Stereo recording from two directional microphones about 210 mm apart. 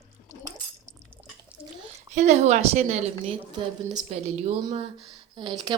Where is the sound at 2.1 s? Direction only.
35° right (ahead or behind).